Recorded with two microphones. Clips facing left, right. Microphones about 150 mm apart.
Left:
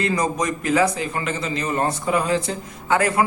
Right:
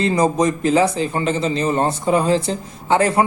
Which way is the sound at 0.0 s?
30° right (ahead or behind).